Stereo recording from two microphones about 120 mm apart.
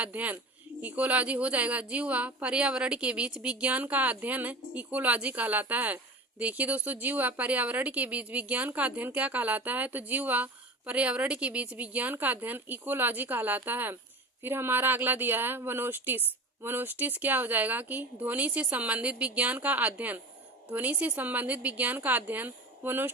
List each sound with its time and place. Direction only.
0.0 s speech: 15° right (ahead or behind)